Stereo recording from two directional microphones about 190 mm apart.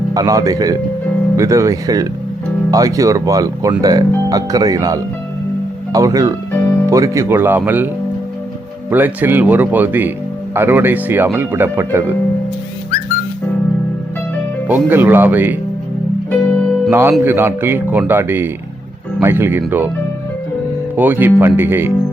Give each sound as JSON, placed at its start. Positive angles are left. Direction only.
{"t": 0.1, "sound": "speech", "side_deg": -20}
{"t": 8.9, "sound": "speech", "side_deg": -10}
{"t": 14.7, "sound": "speech", "side_deg": -10}
{"t": 16.5, "sound": "music", "side_deg": 5}
{"t": 16.9, "sound": "speech", "side_deg": -10}
{"t": 20.9, "sound": "speech", "side_deg": -10}